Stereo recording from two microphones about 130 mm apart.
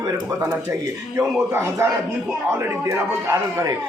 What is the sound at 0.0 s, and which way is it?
A man's voice, 25° right (ahead or behind).